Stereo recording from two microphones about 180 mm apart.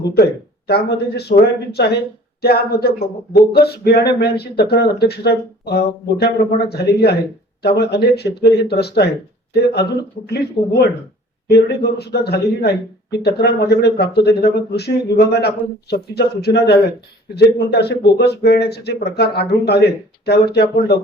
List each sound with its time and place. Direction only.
0.7 s a man's voice: 65° left (ahead or behind)